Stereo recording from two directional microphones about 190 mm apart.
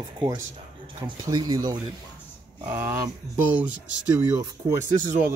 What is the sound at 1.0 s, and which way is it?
Speech, 20° right (ahead or behind).